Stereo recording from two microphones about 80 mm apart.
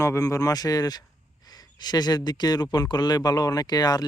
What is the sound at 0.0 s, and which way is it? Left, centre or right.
Speech, left.